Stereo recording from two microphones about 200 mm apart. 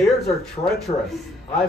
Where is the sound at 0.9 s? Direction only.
30° left (ahead or behind).